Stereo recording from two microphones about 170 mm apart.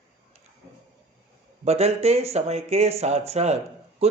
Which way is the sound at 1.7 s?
40° right (ahead or behind).